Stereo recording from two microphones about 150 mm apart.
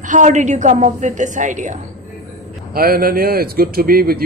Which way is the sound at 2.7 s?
80° right.